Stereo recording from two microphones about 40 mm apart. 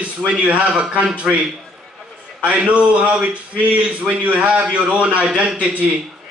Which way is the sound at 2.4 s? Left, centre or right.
Right.